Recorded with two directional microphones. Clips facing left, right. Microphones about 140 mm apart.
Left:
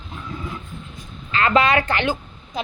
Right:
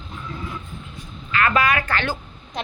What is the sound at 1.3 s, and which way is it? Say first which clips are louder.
Speech: left 2 dB; 25° left (ahead or behind).